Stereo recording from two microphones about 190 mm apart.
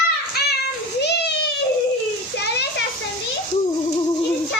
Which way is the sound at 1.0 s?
60° left (ahead or behind).